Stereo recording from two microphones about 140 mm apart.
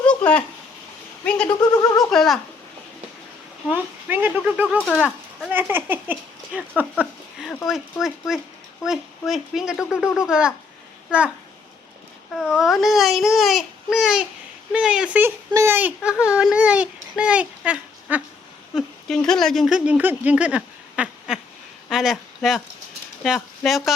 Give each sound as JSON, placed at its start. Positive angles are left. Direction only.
{"t": 0.0, "sound": "a sound", "side_deg": 10}
{"t": 1.2, "sound": "speech", "side_deg": 10}
{"t": 3.7, "sound": "speech", "side_deg": -10}
{"t": 4.8, "sound": "speech", "side_deg": 0}
{"t": 5.5, "sound": "speech", "side_deg": -15}
{"t": 12.3, "sound": "speech", "side_deg": 0}
{"t": 18.7, "sound": "speech", "side_deg": 0}